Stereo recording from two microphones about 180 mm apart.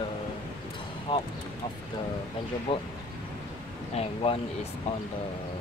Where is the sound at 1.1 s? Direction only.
25° left (ahead or behind).